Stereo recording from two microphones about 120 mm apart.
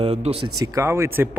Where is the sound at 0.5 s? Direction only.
30° right (ahead or behind).